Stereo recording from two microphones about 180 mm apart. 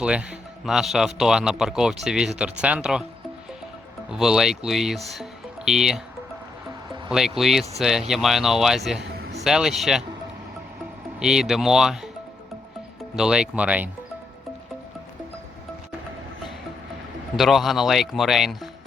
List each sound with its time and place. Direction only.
0.0 s a man's voice: 5° right (ahead or behind)
4.1 s speech: 5° right (ahead or behind)
7.1 s a man's voice: centre (ahead or behind)
9.0 s music: 70° right (ahead or behind)
9.3 s speech: centre (ahead or behind)
11.2 s a man's voice: 5° right (ahead or behind)
13.1 s speech: 5° right (ahead or behind)
17.3 s a man's voice: centre (ahead or behind)